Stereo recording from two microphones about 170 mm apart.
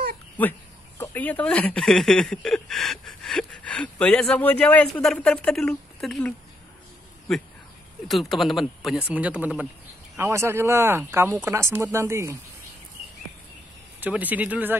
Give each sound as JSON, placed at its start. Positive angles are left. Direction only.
{"t": 0.4, "sound": "speech", "side_deg": 10}
{"t": 8.1, "sound": "speech", "side_deg": 0}
{"t": 13.9, "sound": "speech", "side_deg": -10}